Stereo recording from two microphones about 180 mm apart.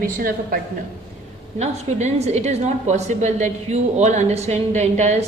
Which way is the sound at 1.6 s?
35° right (ahead or behind).